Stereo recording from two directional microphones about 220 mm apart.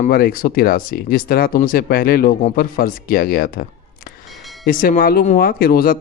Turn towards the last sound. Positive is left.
turn(degrees=40)  # may be behind; listen again after turning